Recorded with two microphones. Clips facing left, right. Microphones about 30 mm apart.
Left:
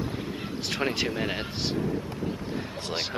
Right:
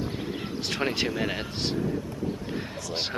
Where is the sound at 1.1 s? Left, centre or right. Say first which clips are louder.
Right 1 dB; centre.